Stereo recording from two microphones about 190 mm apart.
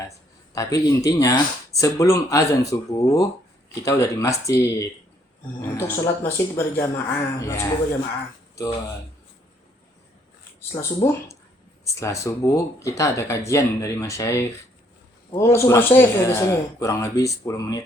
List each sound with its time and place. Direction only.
0.5 s speech: 20° left (ahead or behind)
10.8 s speech: 15° left (ahead or behind)